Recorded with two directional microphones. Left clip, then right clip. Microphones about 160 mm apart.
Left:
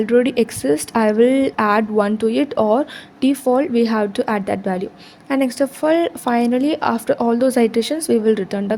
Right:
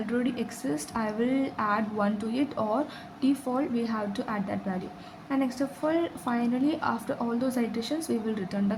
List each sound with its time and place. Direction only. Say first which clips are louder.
0.0 s speech: left 15 dB; 55° left (ahead or behind)